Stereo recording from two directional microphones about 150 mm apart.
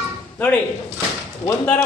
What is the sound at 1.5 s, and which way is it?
Speech, 20° left (ahead or behind).